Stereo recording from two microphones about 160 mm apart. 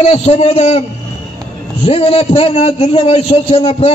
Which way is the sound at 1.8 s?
35° left (ahead or behind).